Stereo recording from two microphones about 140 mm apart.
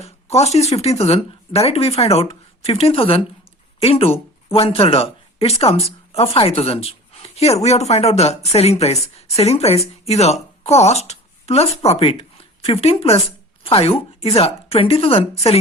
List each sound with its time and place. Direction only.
0.0 s speech: 50° left (ahead or behind)